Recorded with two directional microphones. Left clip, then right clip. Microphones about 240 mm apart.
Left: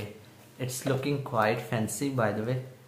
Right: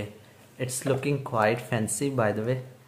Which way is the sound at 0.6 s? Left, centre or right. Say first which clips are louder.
Right 3 dB; right.